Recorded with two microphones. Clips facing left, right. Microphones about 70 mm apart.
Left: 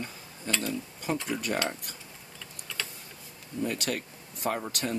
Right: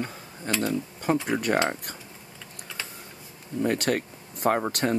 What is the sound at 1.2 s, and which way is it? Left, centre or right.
Speech, right.